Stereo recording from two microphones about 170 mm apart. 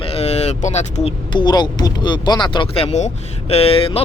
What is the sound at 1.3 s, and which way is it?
Speech, 25° left (ahead or behind).